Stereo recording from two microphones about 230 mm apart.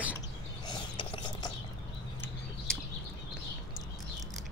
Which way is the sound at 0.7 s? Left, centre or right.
Left.